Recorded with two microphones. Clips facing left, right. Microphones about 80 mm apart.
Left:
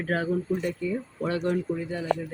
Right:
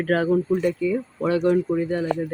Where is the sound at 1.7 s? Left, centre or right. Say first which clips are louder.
Right 5 dB; right.